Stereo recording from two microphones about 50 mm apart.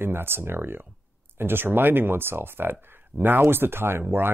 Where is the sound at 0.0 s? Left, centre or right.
Right.